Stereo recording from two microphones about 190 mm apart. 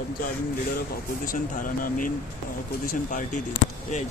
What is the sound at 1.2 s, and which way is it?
Speech, 45° left (ahead or behind).